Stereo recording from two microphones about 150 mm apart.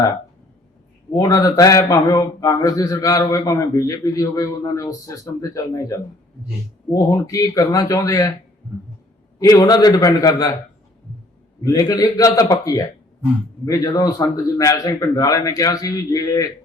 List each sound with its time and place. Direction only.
1.1 s a man's voice: 25° left (ahead or behind)
6.9 s a man's voice: 20° left (ahead or behind)
9.4 s a man's voice: 25° left (ahead or behind)
11.6 s a man's voice: 25° left (ahead or behind)